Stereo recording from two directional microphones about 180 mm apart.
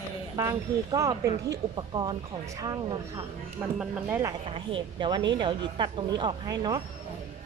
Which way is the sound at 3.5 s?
5° right (ahead or behind).